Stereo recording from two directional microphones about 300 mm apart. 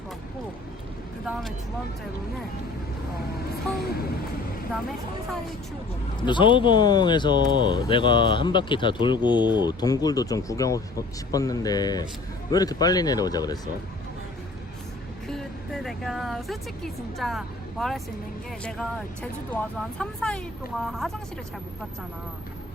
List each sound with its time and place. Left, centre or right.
1.2 s speech: centre
4.7 s speech: centre
6.1 s speech: centre
15.3 s speech: centre